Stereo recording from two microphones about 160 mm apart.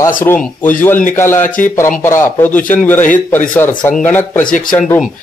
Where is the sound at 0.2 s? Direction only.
10° left (ahead or behind).